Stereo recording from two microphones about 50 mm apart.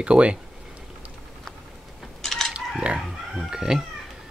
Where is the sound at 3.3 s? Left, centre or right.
Centre.